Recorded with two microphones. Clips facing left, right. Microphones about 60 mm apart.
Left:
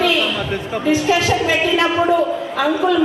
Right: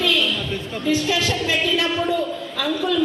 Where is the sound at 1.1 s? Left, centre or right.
Left.